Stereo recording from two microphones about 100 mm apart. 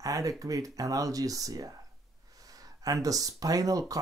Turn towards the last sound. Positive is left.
turn(degrees=-35)  # may be behind; listen again after turning